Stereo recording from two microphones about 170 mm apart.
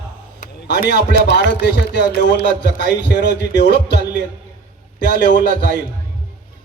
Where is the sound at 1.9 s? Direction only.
80° left.